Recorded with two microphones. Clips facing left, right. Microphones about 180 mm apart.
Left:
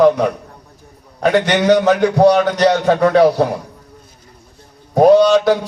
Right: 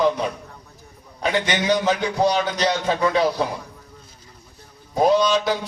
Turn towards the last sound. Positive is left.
turn(degrees=65)  # may be behind; listen again after turning